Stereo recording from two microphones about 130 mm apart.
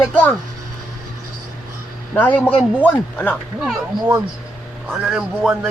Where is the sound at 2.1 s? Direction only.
10° left (ahead or behind).